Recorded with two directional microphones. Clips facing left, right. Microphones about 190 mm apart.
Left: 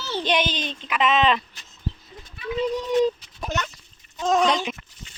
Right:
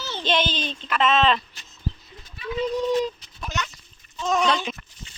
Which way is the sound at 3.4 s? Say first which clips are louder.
Left 3 dB; 55° left (ahead or behind).